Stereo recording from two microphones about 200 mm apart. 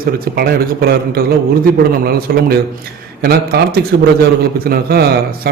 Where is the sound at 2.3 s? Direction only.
50° right (ahead or behind).